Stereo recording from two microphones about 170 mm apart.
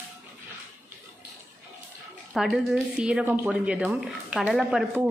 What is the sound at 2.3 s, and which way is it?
Speech, centre (ahead or behind).